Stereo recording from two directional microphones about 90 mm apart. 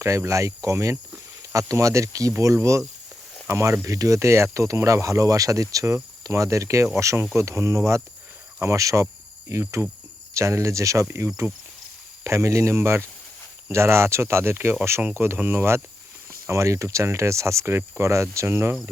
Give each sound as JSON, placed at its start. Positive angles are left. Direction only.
{"t": 0.0, "sound": "speech", "side_deg": -35}